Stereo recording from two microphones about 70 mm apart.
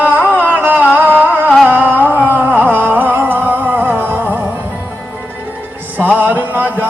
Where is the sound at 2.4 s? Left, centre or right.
Right.